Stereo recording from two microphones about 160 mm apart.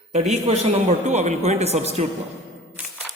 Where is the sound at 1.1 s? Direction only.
45° right (ahead or behind).